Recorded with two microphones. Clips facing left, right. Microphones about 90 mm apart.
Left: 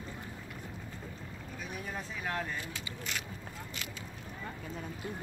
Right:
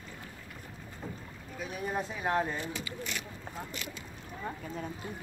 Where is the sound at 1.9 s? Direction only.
30° right (ahead or behind).